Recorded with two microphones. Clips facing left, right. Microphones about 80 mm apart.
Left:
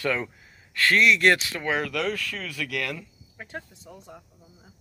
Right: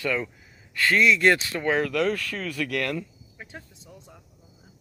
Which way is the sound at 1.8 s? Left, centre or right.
Right.